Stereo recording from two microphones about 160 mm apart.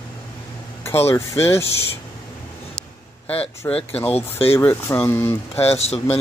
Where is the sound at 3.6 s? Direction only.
15° left (ahead or behind).